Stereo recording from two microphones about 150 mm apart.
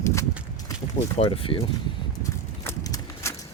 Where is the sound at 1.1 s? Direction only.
40° left (ahead or behind).